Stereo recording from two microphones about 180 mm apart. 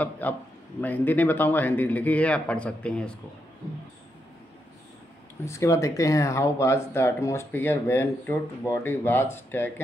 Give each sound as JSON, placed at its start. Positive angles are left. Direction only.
{"t": 0.0, "sound": "speech", "side_deg": 10}
{"t": 5.4, "sound": "speech", "side_deg": 15}